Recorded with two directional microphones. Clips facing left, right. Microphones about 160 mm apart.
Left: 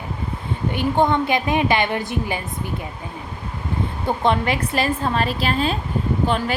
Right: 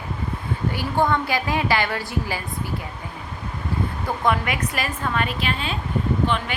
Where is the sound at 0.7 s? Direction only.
20° left (ahead or behind).